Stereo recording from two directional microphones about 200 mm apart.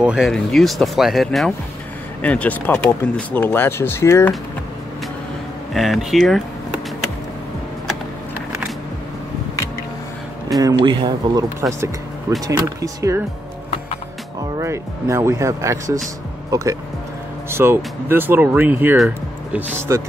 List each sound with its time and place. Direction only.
0.0 s speech: centre (ahead or behind)
5.7 s speech: centre (ahead or behind)
10.6 s speech: 20° right (ahead or behind)
14.6 s speech: 15° right (ahead or behind)